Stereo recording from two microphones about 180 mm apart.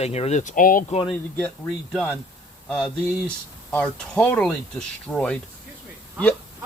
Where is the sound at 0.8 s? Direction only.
35° left (ahead or behind).